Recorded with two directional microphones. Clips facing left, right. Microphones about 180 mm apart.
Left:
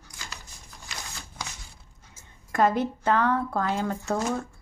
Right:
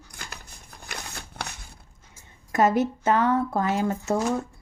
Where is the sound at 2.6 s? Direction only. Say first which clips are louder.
Right 2 dB; 5° right (ahead or behind).